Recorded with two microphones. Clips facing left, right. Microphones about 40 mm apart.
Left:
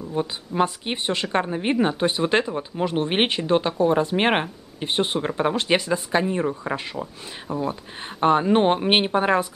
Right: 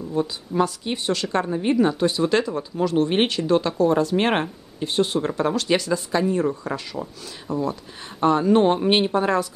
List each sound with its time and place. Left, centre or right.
0.1 s speech: left